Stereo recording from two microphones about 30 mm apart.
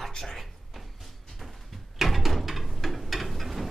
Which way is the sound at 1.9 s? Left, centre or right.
Centre.